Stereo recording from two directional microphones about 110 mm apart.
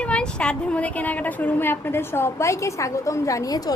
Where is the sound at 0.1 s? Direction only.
10° left (ahead or behind).